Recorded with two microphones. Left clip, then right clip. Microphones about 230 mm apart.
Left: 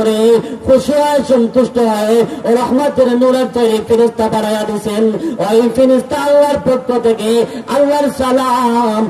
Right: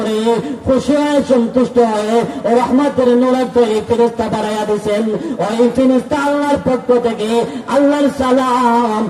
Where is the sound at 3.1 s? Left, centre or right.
Left.